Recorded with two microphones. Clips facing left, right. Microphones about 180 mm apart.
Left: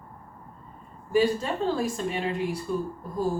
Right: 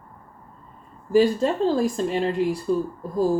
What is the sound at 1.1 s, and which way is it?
Speech, 35° right (ahead or behind).